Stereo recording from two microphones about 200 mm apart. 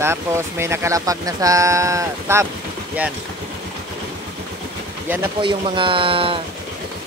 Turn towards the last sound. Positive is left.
turn(degrees=-25)  # may be behind; listen again after turning